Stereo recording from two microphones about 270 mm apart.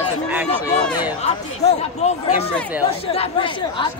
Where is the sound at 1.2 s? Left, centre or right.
Left.